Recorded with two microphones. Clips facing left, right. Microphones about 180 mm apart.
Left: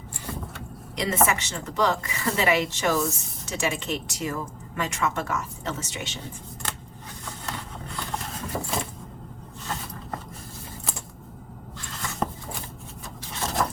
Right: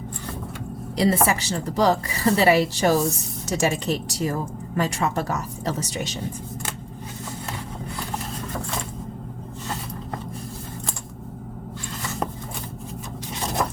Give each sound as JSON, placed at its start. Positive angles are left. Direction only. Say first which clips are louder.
{"t": 0.9, "sound": "a woman's voice", "louder": "right 4 dB", "side_deg": -35}